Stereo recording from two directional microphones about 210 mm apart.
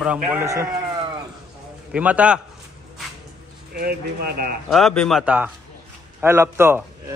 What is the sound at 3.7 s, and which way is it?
Speech, 45° right (ahead or behind).